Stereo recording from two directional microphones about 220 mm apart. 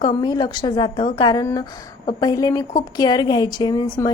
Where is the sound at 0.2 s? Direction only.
20° left (ahead or behind).